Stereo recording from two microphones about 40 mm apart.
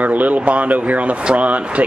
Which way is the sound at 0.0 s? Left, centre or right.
Right.